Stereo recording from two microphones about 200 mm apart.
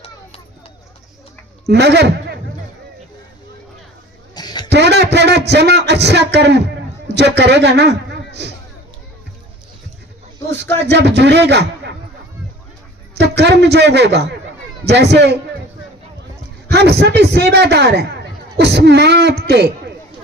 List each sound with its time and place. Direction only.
1.6 s a man's voice: 55° right (ahead or behind)
4.4 s a sound: 20° left (ahead or behind)
4.7 s a sound: 55° right (ahead or behind)
7.3 s a man's voice: 60° right (ahead or behind)
10.8 s a man's voice: 60° right (ahead or behind)
13.1 s a man's voice: 55° right (ahead or behind)
16.6 s a man's voice: 55° right (ahead or behind)